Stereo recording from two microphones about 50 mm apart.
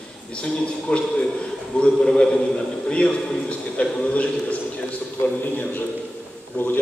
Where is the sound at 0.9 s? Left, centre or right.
Centre.